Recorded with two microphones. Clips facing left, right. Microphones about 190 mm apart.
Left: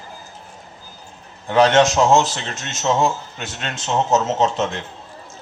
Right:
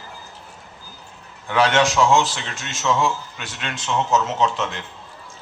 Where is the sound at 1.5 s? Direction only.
40° left (ahead or behind).